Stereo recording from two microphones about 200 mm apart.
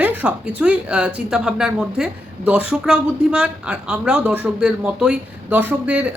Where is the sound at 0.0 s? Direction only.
10° right (ahead or behind).